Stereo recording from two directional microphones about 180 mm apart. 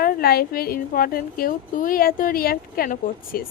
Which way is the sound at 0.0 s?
55° left (ahead or behind).